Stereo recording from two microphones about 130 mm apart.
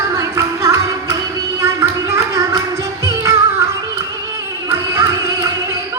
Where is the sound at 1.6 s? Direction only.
25° right (ahead or behind).